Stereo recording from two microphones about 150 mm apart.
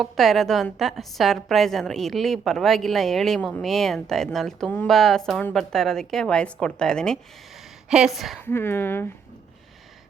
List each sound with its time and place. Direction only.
0.0 s a woman's voice: centre (ahead or behind)
8.4 s speech: 15° left (ahead or behind)